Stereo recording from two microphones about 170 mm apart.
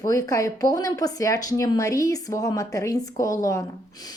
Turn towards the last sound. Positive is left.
turn(degrees=20)  # may be behind; listen again after turning